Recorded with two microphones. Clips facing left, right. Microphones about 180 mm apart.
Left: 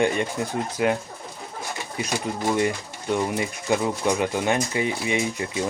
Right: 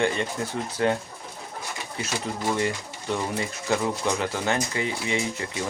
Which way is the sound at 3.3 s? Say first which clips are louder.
Left 2 dB; 15° left (ahead or behind).